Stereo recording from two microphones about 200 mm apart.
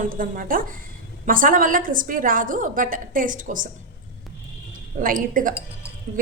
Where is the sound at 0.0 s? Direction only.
45° right (ahead or behind).